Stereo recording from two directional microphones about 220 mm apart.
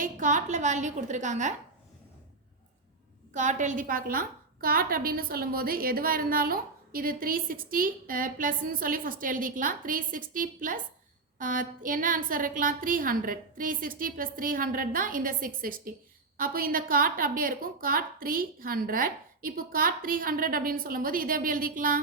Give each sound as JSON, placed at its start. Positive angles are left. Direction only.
{"t": 0.0, "sound": "a woman's voice", "side_deg": -35}
{"t": 3.3, "sound": "a woman's voice", "side_deg": -35}